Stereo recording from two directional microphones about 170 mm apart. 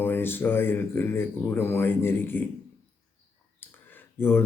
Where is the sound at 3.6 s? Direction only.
10° left (ahead or behind).